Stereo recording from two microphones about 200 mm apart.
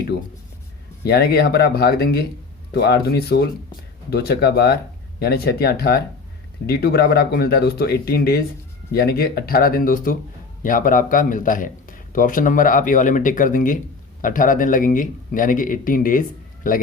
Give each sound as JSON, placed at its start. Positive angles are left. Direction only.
{"t": 1.0, "sound": "speech", "side_deg": 55}